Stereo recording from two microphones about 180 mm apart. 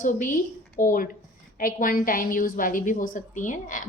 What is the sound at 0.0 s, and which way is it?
A woman's voice, 45° left (ahead or behind).